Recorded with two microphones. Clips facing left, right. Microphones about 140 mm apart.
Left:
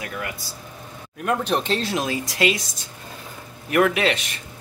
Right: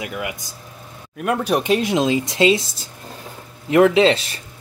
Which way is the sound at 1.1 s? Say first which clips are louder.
Right 3 dB; 5° right (ahead or behind).